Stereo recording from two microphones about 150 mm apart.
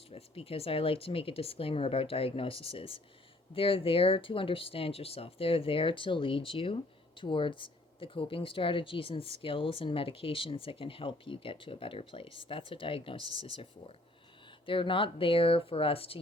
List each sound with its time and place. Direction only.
0.1 s speech: 40° left (ahead or behind)